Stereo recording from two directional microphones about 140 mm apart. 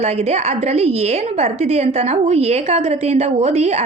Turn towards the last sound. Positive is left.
turn(degrees=-50)  # may be behind; listen again after turning